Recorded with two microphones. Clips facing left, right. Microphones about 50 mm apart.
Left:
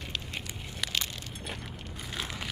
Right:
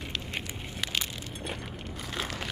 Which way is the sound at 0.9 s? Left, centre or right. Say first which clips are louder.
Right 1 dB; centre.